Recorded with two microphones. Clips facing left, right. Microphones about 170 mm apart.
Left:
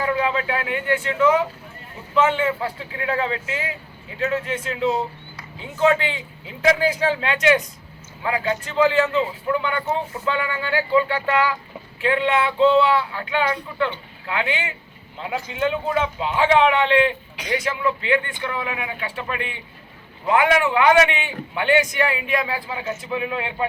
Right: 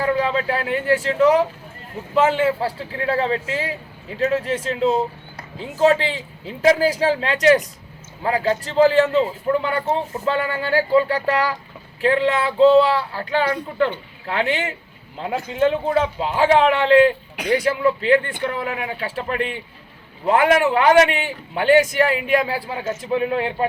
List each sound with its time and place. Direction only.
0.0 s a man's voice: 35° right (ahead or behind)